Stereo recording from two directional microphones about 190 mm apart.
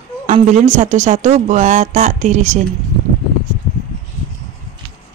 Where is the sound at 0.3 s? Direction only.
40° right (ahead or behind).